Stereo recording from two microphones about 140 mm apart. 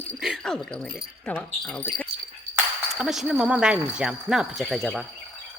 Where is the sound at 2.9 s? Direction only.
5° right (ahead or behind).